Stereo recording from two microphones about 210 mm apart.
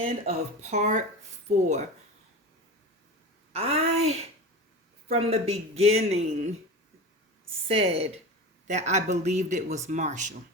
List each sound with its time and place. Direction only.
0.0 s speech: 30° right (ahead or behind)
3.5 s speech: 30° right (ahead or behind)
5.0 s speech: 30° right (ahead or behind)
7.8 s speech: 30° right (ahead or behind)